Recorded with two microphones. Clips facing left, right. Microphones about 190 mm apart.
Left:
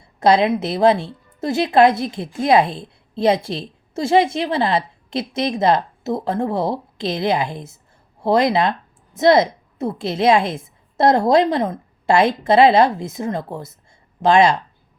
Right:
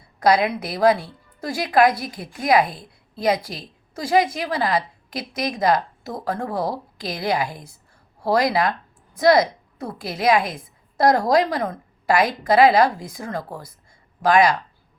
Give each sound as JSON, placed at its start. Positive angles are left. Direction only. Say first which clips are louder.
{"t": 0.0, "sound": "a woman's voice", "louder": "left 3 dB", "side_deg": 25}